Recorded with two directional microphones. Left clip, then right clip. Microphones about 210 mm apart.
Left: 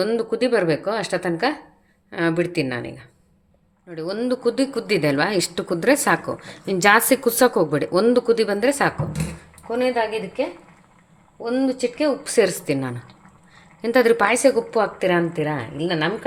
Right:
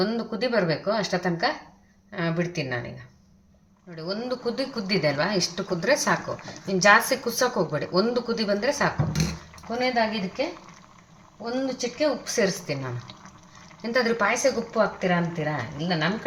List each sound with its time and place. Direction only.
0.0 s a woman's voice: 50° left (ahead or behind)
3.9 s a woman's voice: 50° left (ahead or behind)
11.5 s a woman's voice: 50° left (ahead or behind)